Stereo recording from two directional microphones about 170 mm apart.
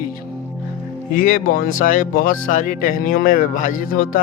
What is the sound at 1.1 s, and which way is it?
Speech, 50° left (ahead or behind).